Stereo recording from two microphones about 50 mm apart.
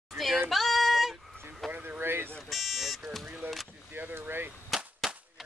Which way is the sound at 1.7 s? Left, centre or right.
Right.